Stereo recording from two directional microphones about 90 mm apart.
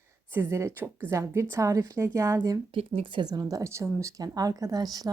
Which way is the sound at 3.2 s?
45° right (ahead or behind).